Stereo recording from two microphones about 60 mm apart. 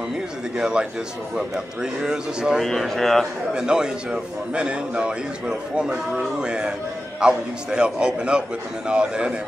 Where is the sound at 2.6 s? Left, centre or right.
Centre.